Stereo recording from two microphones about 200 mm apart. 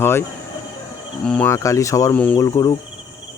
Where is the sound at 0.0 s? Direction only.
10° left (ahead or behind).